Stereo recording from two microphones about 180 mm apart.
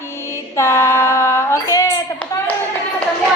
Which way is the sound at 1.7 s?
20° left (ahead or behind).